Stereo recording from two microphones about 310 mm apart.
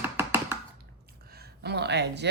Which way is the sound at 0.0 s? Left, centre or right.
Centre.